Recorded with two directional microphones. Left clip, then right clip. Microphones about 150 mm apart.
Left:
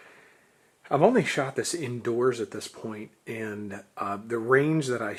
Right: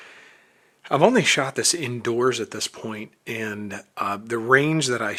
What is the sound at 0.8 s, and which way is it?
Speech, 35° right (ahead or behind).